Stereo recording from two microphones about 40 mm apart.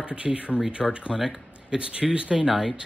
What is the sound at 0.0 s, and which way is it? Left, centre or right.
Speech, right.